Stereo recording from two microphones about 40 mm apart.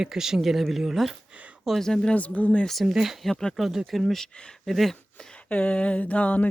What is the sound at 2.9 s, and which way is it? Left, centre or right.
Speech, centre.